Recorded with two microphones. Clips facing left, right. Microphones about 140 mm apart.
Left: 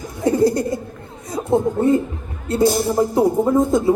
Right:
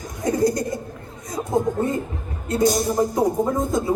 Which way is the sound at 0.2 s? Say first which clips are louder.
Left 4 dB; 30° left (ahead or behind).